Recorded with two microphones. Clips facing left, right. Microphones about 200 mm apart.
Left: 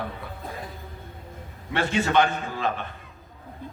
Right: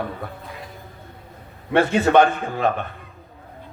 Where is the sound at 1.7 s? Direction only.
60° right (ahead or behind).